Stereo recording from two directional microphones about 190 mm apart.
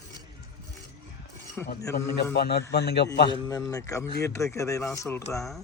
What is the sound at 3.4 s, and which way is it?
Speech, 20° left (ahead or behind).